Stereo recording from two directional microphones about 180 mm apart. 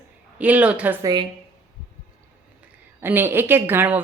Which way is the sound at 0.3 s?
10° right (ahead or behind).